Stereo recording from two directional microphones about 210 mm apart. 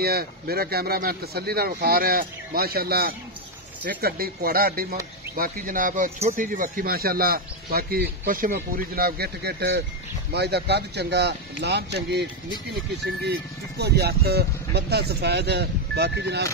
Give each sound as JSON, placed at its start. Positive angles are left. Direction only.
{"t": 0.0, "sound": "a man's voice", "side_deg": -45}